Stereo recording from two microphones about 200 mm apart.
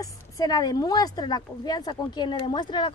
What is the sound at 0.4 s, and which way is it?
Speech, 20° left (ahead or behind).